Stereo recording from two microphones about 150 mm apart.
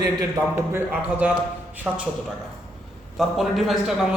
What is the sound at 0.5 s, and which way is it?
A man's voice, 10° right (ahead or behind).